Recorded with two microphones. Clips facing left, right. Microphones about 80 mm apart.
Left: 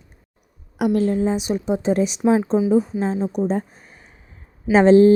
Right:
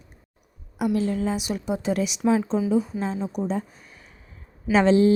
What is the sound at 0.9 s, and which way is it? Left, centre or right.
Speech, left.